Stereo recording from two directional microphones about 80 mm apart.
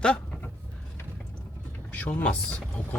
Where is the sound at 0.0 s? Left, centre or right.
Centre.